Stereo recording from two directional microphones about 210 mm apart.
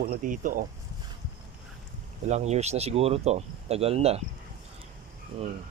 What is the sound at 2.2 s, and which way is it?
Speech, 30° right (ahead or behind).